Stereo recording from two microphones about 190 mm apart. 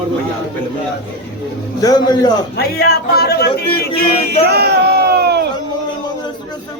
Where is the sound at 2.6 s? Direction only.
55° left (ahead or behind).